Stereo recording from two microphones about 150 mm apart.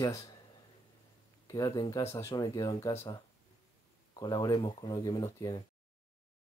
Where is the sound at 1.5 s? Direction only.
25° left (ahead or behind).